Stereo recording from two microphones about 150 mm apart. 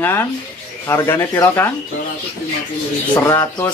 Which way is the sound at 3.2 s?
20° left (ahead or behind).